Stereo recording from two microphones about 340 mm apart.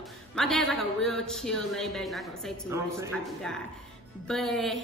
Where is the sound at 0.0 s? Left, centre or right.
Centre.